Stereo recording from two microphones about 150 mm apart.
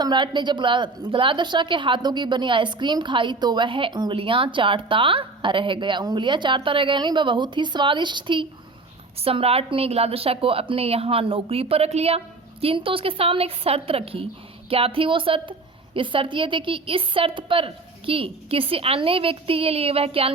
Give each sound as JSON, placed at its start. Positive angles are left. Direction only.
{"t": 0.0, "sound": "a woman's voice", "side_deg": -30}